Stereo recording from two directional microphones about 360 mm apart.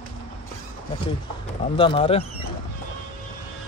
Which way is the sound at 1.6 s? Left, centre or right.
Centre.